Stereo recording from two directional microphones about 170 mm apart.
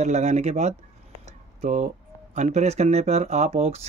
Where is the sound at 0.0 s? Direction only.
40° right (ahead or behind).